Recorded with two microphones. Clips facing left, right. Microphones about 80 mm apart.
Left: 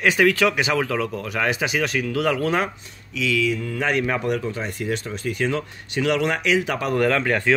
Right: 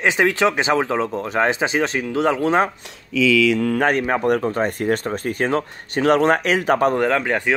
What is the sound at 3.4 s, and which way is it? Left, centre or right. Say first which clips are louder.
Mantra: right 6 dB; right.